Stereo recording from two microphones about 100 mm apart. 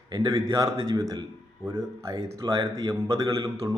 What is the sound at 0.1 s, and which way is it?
Speech, 35° right (ahead or behind).